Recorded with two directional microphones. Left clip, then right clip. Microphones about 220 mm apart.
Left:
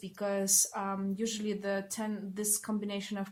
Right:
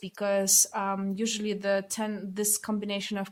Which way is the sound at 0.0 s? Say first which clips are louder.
Right 6 dB; 45° right (ahead or behind).